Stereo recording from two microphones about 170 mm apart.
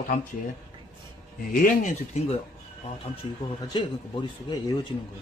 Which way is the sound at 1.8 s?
45° left (ahead or behind).